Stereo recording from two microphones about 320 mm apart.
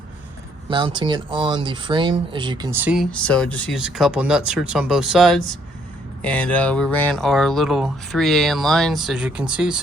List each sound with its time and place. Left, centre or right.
0.7 s speech: centre